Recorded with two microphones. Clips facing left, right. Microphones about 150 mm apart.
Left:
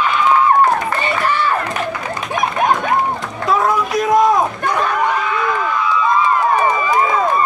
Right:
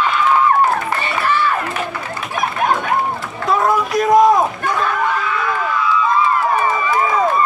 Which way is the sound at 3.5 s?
Centre (ahead or behind).